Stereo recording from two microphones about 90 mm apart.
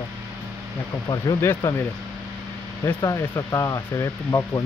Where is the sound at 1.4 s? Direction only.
30° left (ahead or behind).